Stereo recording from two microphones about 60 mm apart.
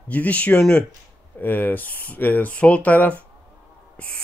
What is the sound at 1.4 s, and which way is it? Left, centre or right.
Speech, left.